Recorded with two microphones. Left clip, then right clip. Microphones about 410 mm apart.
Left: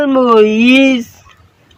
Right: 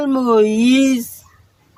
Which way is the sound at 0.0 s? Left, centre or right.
Right.